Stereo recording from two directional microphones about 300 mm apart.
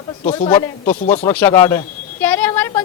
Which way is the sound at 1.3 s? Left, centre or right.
Centre.